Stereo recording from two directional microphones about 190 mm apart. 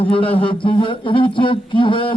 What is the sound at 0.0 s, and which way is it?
A man's voice, 30° left (ahead or behind).